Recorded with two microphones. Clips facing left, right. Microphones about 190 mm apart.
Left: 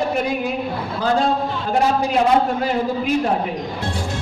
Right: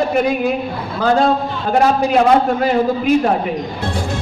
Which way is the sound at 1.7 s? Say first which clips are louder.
Right 4 dB; 75° right (ahead or behind).